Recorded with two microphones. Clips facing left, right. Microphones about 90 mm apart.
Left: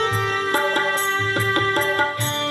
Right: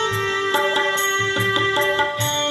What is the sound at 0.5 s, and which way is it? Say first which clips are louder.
Music: right 1 dB; 15° left (ahead or behind).